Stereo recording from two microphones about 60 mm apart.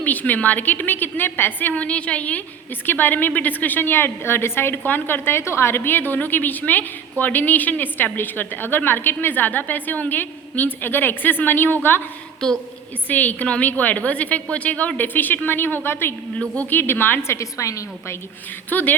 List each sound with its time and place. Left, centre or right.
0.0 s a woman's voice: left
1.7 s a woman's voice: left
12.4 s a woman's voice: centre
13.1 s a woman's voice: left
17.3 s a woman's voice: left
18.7 s a woman's voice: left